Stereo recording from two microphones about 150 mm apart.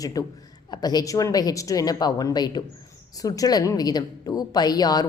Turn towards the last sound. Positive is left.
turn(degrees=25)  # may be behind; listen again after turning